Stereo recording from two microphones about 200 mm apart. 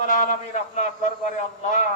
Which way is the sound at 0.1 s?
40° left (ahead or behind).